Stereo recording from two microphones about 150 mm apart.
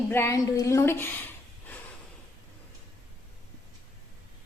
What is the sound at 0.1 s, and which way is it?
Speech, 15° left (ahead or behind).